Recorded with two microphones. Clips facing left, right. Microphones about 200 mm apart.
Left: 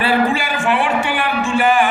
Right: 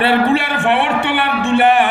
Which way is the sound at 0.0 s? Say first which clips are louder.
Right 3 dB; 60° right (ahead or behind).